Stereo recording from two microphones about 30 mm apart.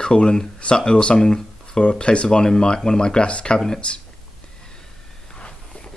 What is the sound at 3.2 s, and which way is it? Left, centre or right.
Speech, left.